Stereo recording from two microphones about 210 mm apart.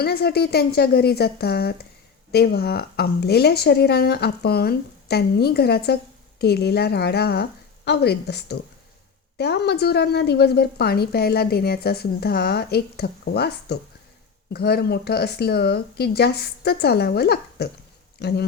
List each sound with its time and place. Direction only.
0.0 s a woman's voice: 50° left (ahead or behind)